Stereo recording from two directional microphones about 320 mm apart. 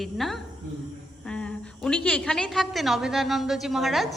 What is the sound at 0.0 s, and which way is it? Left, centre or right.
A woman's voice, centre.